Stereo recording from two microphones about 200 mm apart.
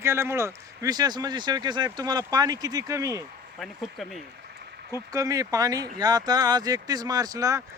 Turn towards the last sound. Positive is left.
turn(degrees=-15)  # may be behind; listen again after turning